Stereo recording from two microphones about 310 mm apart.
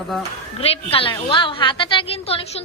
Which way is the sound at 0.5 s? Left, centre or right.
Centre.